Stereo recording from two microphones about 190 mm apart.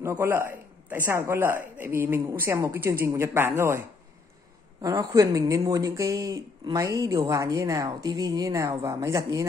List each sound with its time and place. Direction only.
0.0 s a woman's voice: 10° right (ahead or behind)
4.8 s a woman's voice: 20° right (ahead or behind)